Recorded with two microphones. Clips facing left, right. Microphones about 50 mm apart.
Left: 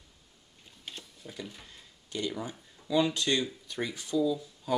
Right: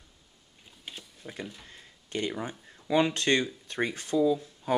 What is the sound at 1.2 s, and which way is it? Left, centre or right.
Speech, right.